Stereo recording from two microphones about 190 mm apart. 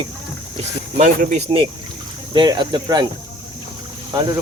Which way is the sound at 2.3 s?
25° right (ahead or behind).